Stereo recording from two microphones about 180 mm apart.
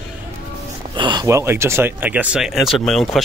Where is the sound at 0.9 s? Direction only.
25° right (ahead or behind).